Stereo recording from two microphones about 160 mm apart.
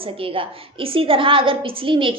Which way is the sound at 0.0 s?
35° right (ahead or behind).